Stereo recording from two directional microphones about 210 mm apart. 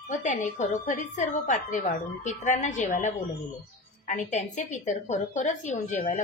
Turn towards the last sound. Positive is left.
turn(degrees=35)  # may be behind; listen again after turning